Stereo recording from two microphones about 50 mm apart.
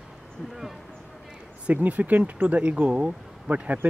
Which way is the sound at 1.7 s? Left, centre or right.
Right.